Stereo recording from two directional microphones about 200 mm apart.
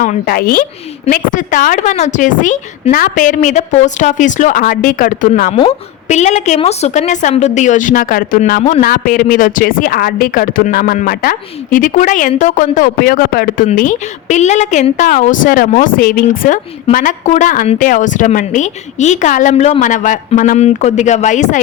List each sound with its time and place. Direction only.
0.0 s a woman's voice: 45° left (ahead or behind)
5.5 s a woman's voice: 30° left (ahead or behind)